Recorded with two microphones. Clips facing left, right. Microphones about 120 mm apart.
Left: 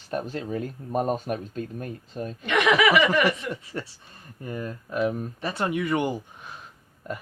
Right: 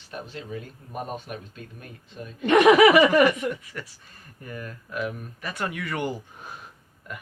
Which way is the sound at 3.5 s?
30° left (ahead or behind).